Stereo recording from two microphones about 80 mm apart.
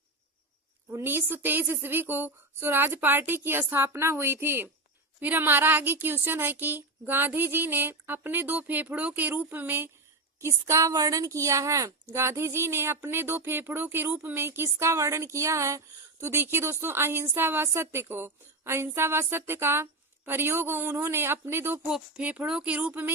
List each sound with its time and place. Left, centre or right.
0.9 s a woman's voice: right
10.4 s a woman's voice: right
21.8 s speech: centre
22.2 s a woman's voice: centre